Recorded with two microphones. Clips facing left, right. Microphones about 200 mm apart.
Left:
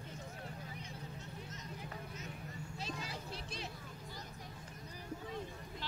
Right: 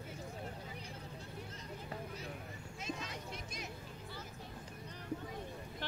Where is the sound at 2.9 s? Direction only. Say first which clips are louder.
Right 4 dB; 35° left (ahead or behind).